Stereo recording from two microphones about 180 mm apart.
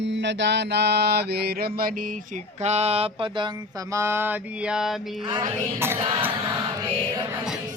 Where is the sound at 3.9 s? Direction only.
15° right (ahead or behind).